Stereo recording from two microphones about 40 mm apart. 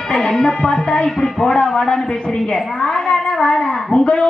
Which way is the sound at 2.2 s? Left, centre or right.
Left.